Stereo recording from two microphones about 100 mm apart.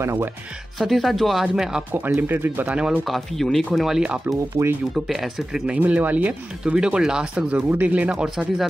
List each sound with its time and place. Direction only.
0.0 s speech: 30° right (ahead or behind)
0.7 s speech: centre (ahead or behind)
1.9 s speech: 20° right (ahead or behind)
3.4 s speech: 5° left (ahead or behind)
4.3 s speech: 30° right (ahead or behind)
4.9 s speech: centre (ahead or behind)
5.7 s speech: 15° right (ahead or behind)